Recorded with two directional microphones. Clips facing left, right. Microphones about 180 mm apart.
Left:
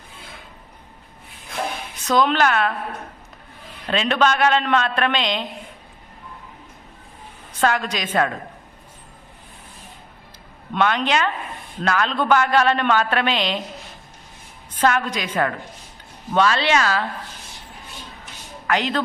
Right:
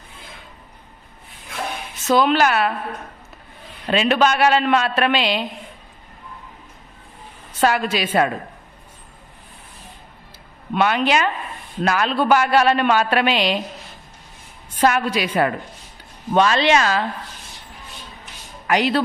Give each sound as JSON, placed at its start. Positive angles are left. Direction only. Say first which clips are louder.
{"t": 2.1, "sound": "a woman's voice", "louder": "right 1 dB", "side_deg": -5}
{"t": 3.8, "sound": "a woman's voice", "louder": "right 2 dB", "side_deg": -10}
{"t": 7.6, "sound": "a woman's voice", "louder": "right 2 dB", "side_deg": -10}
{"t": 10.8, "sound": "a woman's voice", "louder": "right 2 dB", "side_deg": -10}
{"t": 14.8, "sound": "a woman's voice", "louder": "right 2 dB", "side_deg": -10}
{"t": 18.7, "sound": "a woman's voice", "louder": "right 3 dB", "side_deg": -10}